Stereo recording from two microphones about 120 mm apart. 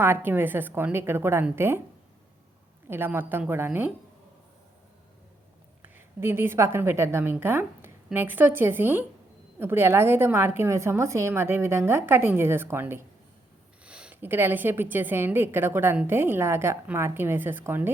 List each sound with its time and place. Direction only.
0.0 s a woman's voice: 20° right (ahead or behind)
2.8 s a woman's voice: 20° right (ahead or behind)
5.8 s a woman's voice: 20° right (ahead or behind)
13.8 s a woman's voice: 10° right (ahead or behind)